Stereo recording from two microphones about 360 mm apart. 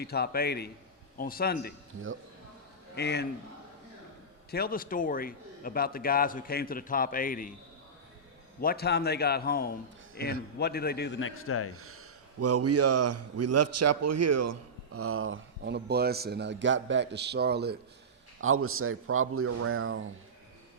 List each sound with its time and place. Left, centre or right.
0.0 s a man's voice: left
2.9 s a man's voice: left
4.5 s a man's voice: left
8.6 s a man's voice: left
11.8 s a man's voice: right